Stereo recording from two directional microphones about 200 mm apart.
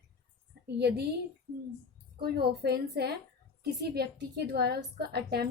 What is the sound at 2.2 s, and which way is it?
A woman's voice, 50° right (ahead or behind).